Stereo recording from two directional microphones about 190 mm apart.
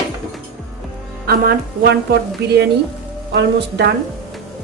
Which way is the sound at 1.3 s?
55° right (ahead or behind).